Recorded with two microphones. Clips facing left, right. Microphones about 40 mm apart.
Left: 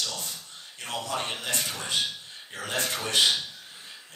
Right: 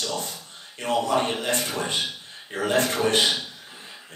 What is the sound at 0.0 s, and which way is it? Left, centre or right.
A man's voice, right.